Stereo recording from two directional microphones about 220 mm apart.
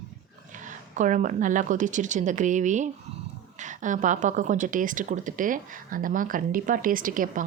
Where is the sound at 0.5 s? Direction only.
35° right (ahead or behind).